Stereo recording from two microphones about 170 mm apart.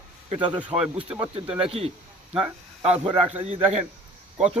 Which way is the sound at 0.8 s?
5° right (ahead or behind).